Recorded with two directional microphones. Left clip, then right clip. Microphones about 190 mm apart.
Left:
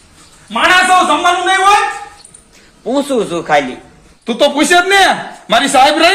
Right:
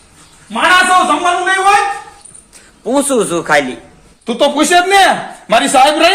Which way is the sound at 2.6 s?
10° right (ahead or behind).